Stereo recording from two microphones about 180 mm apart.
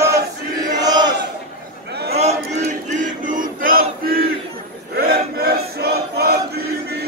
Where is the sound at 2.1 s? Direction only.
40° right (ahead or behind); by 4.2 s 55° right (ahead or behind).